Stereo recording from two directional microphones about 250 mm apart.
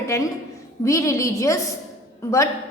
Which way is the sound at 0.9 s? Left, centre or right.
Centre.